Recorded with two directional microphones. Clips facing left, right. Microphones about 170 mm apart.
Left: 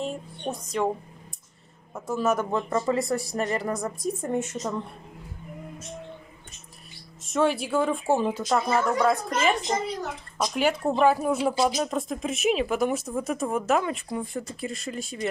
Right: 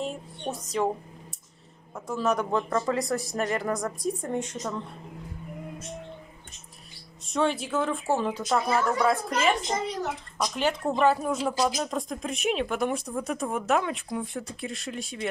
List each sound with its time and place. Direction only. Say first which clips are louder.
0.0 s speech: left 1 dB; centre (ahead or behind)
2.0 s speech: left 2 dB; 10° left (ahead or behind)
7.2 s speech: left 2 dB; 5° left (ahead or behind)
8.4 s speech: left 1 dB; 5° left (ahead or behind)
10.3 s speech: left 4 dB; 10° left (ahead or behind)